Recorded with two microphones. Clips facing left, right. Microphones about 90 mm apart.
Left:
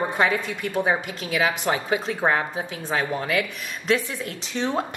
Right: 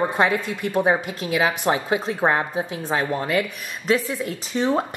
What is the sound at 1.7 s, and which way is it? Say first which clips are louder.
Speech: right 3 dB; 30° right (ahead or behind).